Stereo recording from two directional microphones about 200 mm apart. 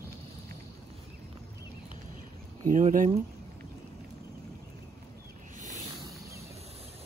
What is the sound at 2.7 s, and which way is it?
Speech, 40° right (ahead or behind).